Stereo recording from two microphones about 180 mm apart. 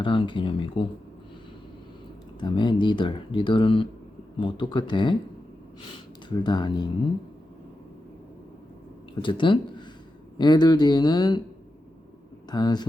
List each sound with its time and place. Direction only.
0.0 s speech: 30° left (ahead or behind)
2.4 s speech: 25° left (ahead or behind)
6.2 s speech: 25° left (ahead or behind)
9.2 s speech: 25° left (ahead or behind)
12.5 s speech: 25° left (ahead or behind)